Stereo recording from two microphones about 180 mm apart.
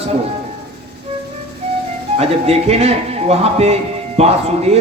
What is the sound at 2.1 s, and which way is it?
A man's voice, 35° right (ahead or behind).